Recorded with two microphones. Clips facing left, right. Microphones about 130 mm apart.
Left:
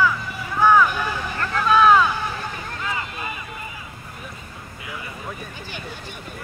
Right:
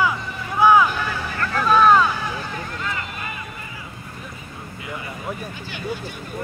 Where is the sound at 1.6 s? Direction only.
Centre (ahead or behind).